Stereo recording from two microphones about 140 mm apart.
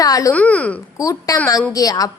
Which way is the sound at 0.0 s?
25° left (ahead or behind).